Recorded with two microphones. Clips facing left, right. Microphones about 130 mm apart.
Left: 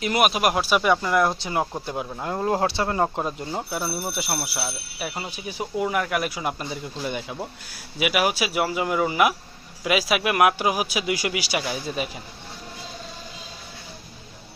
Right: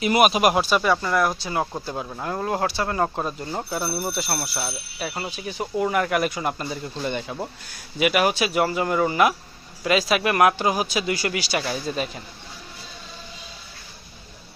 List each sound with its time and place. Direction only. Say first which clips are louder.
0.0 s speech: right 3 dB; centre (ahead or behind)
0.7 s a man's voice: left 1 dB; 15° left (ahead or behind)
3.7 s a man's voice: right 2 dB; 5° left (ahead or behind)